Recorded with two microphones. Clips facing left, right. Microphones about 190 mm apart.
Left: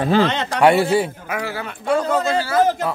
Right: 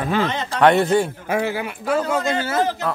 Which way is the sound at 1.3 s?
20° right (ahead or behind).